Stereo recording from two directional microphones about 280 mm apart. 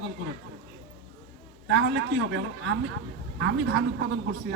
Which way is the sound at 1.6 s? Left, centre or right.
Right.